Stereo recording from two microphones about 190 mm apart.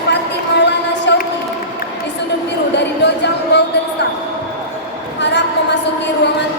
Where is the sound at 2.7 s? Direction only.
65° left (ahead or behind).